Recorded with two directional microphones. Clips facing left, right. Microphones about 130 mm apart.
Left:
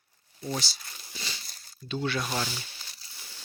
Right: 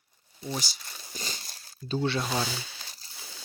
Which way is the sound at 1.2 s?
45° right (ahead or behind).